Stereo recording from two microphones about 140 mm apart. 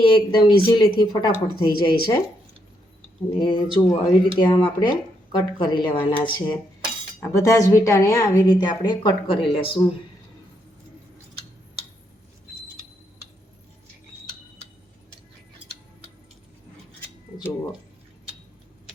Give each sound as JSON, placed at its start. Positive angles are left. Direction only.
{"t": 0.0, "sound": "speech", "side_deg": 35}
{"t": 3.4, "sound": "speech", "side_deg": 35}
{"t": 7.3, "sound": "speech", "side_deg": 20}